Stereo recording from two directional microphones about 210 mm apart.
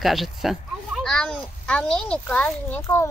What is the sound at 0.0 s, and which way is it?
A child's voice, centre (ahead or behind).